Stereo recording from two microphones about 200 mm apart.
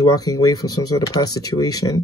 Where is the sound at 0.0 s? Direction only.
20° left (ahead or behind).